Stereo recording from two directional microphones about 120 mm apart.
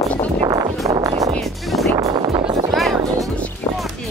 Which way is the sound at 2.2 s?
45° right (ahead or behind).